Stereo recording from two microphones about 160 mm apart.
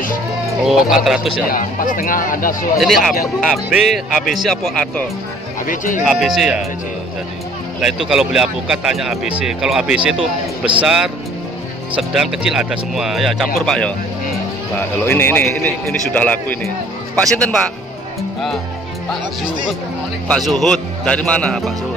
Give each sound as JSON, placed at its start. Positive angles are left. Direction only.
{"t": 0.7, "sound": "speech", "side_deg": 0}
{"t": 1.5, "sound": "speech", "side_deg": 60}
{"t": 2.8, "sound": "speech", "side_deg": 0}
{"t": 5.7, "sound": "speech", "side_deg": 55}
{"t": 6.0, "sound": "speech", "side_deg": 0}
{"t": 7.8, "sound": "a man's voice", "side_deg": -5}
{"t": 20.2, "sound": "speech", "side_deg": 0}